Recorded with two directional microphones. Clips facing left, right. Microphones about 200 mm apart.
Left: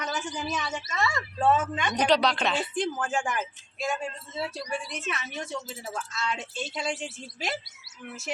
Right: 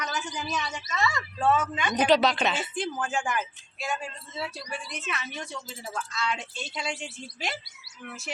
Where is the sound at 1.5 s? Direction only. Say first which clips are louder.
Right 1 dB; centre (ahead or behind).